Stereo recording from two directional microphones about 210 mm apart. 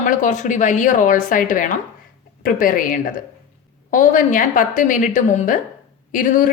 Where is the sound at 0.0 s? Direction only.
35° left (ahead or behind).